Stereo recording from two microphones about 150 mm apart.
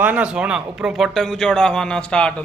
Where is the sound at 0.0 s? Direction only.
10° right (ahead or behind).